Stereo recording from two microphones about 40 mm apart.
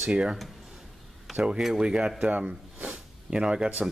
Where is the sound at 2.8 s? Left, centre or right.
Centre.